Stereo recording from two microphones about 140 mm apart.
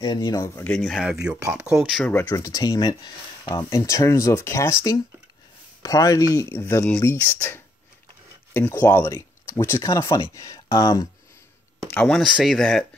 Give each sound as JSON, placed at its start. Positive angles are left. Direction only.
{"t": 0.0, "sound": "speech", "side_deg": 30}
{"t": 0.7, "sound": "speech", "side_deg": 0}
{"t": 2.2, "sound": "speech", "side_deg": 25}
{"t": 5.8, "sound": "speech", "side_deg": 25}
{"t": 12.1, "sound": "speech", "side_deg": -5}